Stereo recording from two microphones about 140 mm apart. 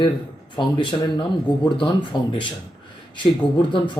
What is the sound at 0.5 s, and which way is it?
A man's voice, 35° left (ahead or behind).